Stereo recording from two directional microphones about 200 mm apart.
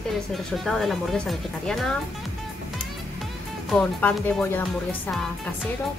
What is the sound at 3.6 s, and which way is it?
Speech, centre (ahead or behind).